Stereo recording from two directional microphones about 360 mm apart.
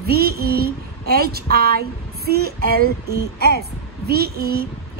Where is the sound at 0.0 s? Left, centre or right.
Right.